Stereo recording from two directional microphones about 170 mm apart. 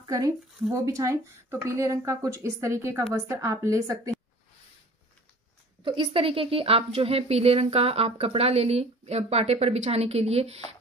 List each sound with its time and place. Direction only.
0.0 s speech: 20° right (ahead or behind)
5.9 s a woman's voice: 30° right (ahead or behind)